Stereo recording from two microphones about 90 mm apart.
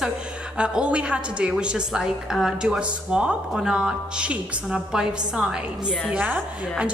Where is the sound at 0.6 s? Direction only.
10° right (ahead or behind).